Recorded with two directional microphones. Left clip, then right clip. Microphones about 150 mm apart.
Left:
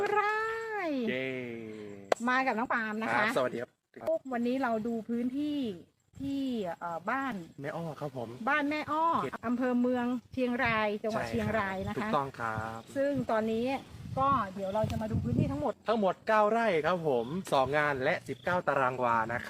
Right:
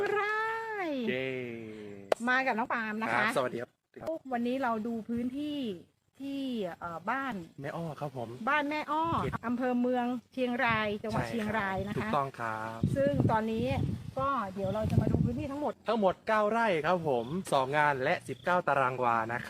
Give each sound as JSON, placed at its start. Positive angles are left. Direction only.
{"t": 0.1, "sound": "cat", "side_deg": -10}
{"t": 2.2, "sound": "speech", "side_deg": -10}
{"t": 15.6, "sound": "speech", "side_deg": -20}